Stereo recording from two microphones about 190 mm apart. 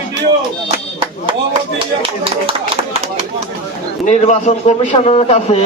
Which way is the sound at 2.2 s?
30° right (ahead or behind).